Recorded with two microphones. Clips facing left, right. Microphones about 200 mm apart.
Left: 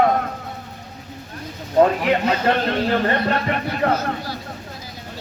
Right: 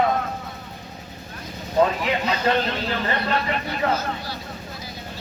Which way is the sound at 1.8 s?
50° left (ahead or behind).